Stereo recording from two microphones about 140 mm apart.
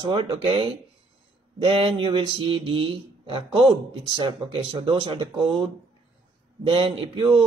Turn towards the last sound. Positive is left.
turn(degrees=-35)  # may be behind; listen again after turning